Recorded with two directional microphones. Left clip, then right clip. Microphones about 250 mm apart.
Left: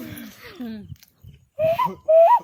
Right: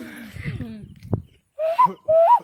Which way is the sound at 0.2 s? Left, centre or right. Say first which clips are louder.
Right 3 dB; centre.